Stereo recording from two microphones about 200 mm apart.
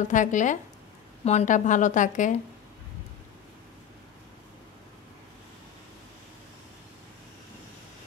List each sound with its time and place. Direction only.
0.1 s a woman's voice: 40° left (ahead or behind)